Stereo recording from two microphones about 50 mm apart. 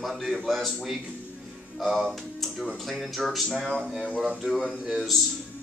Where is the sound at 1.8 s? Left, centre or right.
Centre.